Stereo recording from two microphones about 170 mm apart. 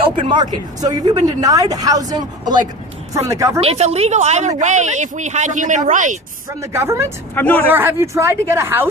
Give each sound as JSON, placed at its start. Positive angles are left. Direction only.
{"t": 0.0, "sound": "speech", "side_deg": -30}
{"t": 3.6, "sound": "a woman's voice", "side_deg": -40}
{"t": 6.6, "sound": "speech", "side_deg": -15}
{"t": 7.3, "sound": "speech", "side_deg": 10}
{"t": 7.7, "sound": "speech", "side_deg": -15}